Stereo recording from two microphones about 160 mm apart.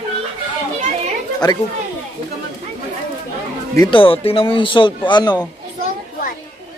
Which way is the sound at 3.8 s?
35° left (ahead or behind).